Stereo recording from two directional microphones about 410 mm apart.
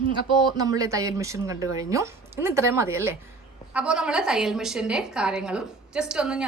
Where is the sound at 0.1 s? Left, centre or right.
Centre.